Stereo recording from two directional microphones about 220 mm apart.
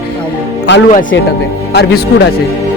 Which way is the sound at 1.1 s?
55° left (ahead or behind).